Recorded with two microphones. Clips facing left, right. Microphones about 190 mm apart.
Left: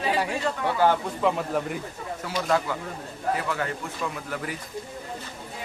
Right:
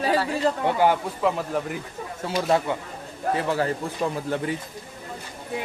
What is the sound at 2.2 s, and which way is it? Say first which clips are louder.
Speech: right 3 dB; 25° right (ahead or behind).